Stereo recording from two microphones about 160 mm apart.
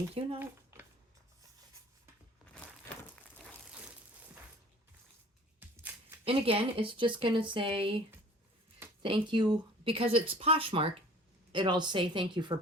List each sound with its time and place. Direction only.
0.1 s speech: 35° right (ahead or behind)
0.3 s a sound: 10° right (ahead or behind)
5.5 s music: 15° right (ahead or behind)
6.2 s a woman's voice: 35° right (ahead or behind)